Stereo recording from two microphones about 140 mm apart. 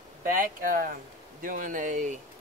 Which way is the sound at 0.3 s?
80° right.